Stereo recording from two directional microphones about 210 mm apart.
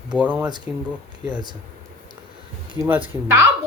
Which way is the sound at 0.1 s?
5° right (ahead or behind).